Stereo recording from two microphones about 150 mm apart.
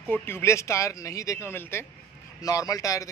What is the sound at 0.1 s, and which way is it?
A man's voice, 15° left (ahead or behind).